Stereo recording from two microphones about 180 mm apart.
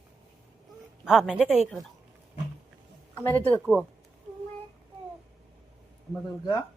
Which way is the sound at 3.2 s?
10° left (ahead or behind).